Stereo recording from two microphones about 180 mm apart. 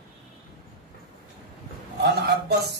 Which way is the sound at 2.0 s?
65° right (ahead or behind).